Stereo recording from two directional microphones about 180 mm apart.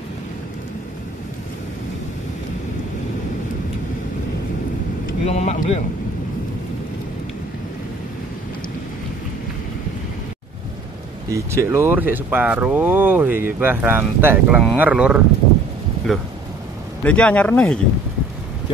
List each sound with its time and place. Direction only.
5.2 s speech: 35° left (ahead or behind)
11.2 s speech: 15° right (ahead or behind); by 17.7 s 5° left (ahead or behind)